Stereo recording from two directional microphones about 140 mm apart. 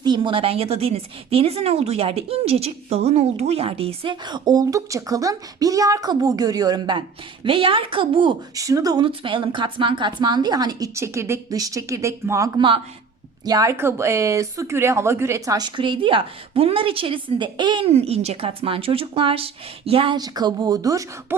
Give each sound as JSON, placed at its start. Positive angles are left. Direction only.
{"t": 0.0, "sound": "speech", "side_deg": -35}
{"t": 8.5, "sound": "a woman's voice", "side_deg": -25}
{"t": 12.5, "sound": "speech", "side_deg": -40}
{"t": 13.4, "sound": "speech", "side_deg": -25}